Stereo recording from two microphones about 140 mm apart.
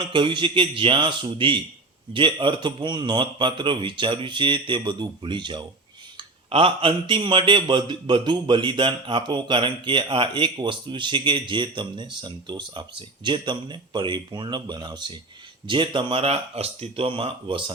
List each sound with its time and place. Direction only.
0.0 s a man's voice: 35° right (ahead or behind)